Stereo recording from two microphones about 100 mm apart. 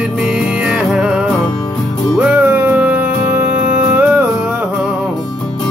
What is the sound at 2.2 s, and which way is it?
Music, 10° right (ahead or behind).